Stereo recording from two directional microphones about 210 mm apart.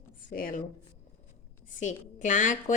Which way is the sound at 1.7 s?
35° left (ahead or behind).